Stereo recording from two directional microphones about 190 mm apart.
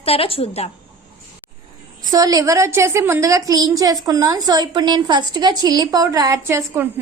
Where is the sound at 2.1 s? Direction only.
20° right (ahead or behind).